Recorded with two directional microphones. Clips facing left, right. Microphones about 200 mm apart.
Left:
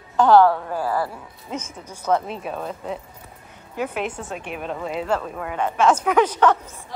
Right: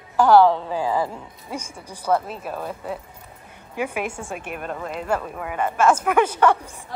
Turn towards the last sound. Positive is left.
turn(degrees=-10)  # may be behind; listen again after turning